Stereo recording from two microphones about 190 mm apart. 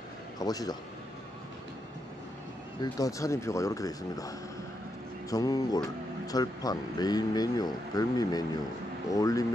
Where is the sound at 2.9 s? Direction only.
20° left (ahead or behind).